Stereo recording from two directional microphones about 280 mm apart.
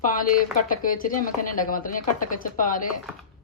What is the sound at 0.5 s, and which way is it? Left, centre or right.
Speech, left.